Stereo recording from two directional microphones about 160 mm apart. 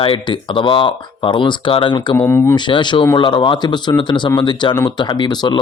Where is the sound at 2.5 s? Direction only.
30° left (ahead or behind).